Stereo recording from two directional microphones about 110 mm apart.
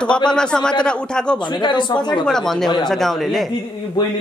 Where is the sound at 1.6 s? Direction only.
45° left (ahead or behind).